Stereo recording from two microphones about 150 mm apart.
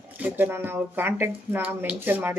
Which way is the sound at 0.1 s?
10° right (ahead or behind).